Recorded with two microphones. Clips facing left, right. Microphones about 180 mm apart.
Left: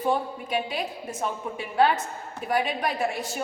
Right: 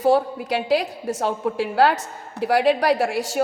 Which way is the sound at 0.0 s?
90° right.